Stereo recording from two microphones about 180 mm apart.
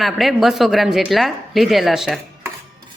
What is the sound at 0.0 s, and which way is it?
A woman's voice, centre (ahead or behind).